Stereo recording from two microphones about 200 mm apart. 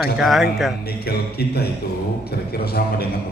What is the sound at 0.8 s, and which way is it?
A man's voice, 50° left (ahead or behind).